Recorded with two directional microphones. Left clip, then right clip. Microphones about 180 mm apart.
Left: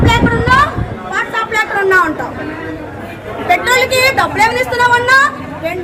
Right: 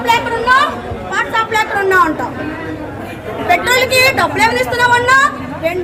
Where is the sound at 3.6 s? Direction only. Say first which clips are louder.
Even; 5° right (ahead or behind).